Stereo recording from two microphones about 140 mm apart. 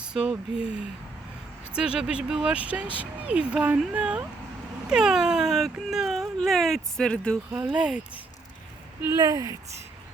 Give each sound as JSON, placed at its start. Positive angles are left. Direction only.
{"t": 0.1, "sound": "speech", "side_deg": -5}
{"t": 1.7, "sound": "speech", "side_deg": -5}
{"t": 7.5, "sound": "speech", "side_deg": -15}
{"t": 9.1, "sound": "speech", "side_deg": -25}